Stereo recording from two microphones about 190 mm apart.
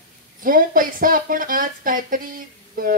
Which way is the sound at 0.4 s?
45° right (ahead or behind).